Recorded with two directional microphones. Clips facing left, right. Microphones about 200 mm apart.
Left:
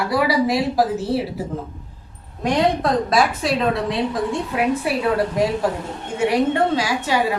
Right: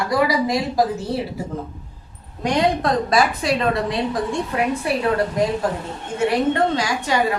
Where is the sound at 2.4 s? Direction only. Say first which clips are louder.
Left 1 dB; centre (ahead or behind).